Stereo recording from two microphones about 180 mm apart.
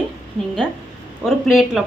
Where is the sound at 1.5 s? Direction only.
Centre (ahead or behind).